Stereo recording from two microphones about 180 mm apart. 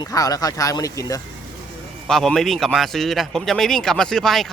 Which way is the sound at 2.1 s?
Centre (ahead or behind).